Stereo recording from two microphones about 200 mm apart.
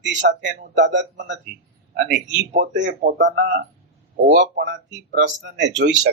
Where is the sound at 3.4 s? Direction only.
40° right (ahead or behind).